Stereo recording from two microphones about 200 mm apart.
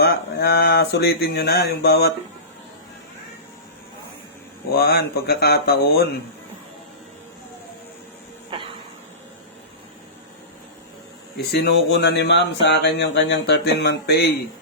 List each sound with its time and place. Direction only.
0.0 s speech: 50° left (ahead or behind)
4.7 s speech: 50° left (ahead or behind)
8.5 s a sound: 25° right (ahead or behind)
11.3 s speech: 55° left (ahead or behind)